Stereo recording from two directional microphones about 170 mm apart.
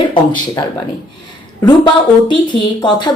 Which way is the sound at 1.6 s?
25° left (ahead or behind).